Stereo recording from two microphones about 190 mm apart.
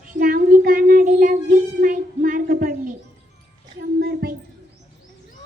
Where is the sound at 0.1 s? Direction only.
50° right (ahead or behind).